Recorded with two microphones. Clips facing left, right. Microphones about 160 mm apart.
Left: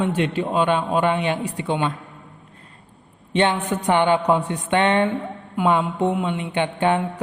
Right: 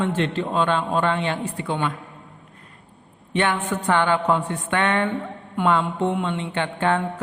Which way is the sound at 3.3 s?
20° left (ahead or behind).